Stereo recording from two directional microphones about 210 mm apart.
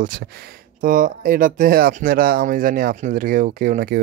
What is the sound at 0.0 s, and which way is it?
Speech, 40° right (ahead or behind).